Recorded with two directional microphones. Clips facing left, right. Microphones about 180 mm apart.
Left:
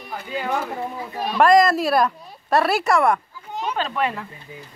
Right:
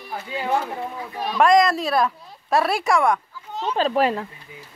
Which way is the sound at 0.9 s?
Centre (ahead or behind).